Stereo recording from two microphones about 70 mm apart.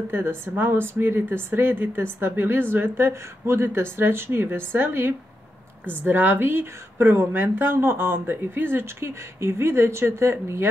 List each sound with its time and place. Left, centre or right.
0.1 s speech: right